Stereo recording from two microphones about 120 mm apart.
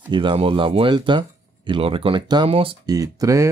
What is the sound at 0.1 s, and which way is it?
Speech, 40° right (ahead or behind).